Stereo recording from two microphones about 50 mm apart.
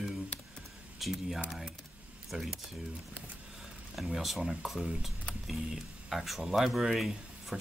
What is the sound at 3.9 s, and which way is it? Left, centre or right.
Speech, centre.